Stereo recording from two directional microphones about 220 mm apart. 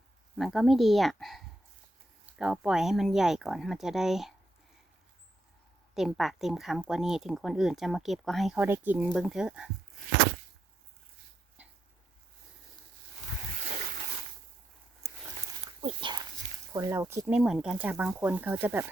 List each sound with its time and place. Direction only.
0.3 s speech: centre (ahead or behind)
2.4 s speech: 5° right (ahead or behind)
5.9 s speech: centre (ahead or behind)
15.8 s dog: 25° right (ahead or behind)
16.7 s speech: 15° right (ahead or behind)